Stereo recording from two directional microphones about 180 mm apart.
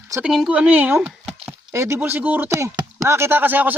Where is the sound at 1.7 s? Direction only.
15° right (ahead or behind).